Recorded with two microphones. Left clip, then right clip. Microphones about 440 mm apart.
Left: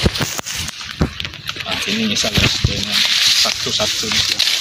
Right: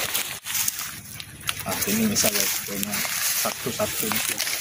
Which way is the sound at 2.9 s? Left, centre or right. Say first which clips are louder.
Left 15 dB; right.